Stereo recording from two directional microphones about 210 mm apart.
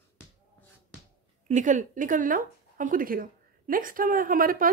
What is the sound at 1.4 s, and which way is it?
Speech, 35° right (ahead or behind).